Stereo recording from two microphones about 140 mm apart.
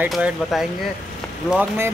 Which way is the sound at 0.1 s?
Centre (ahead or behind).